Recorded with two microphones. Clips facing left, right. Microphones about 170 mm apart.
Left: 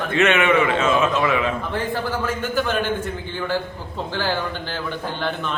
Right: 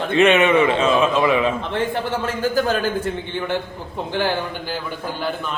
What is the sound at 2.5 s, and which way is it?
Speech, 40° right (ahead or behind).